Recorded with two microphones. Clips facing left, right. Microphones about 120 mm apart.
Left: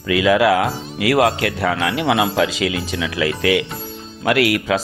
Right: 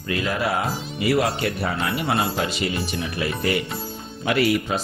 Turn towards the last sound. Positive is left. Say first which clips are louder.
# left 4 dB
turn(degrees=90)